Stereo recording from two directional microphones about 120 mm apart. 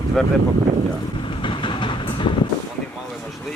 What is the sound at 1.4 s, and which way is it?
Train, 45° left (ahead or behind).